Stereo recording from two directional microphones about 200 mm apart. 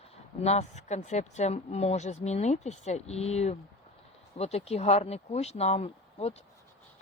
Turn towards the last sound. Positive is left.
turn(degrees=30)  # may be behind; listen again after turning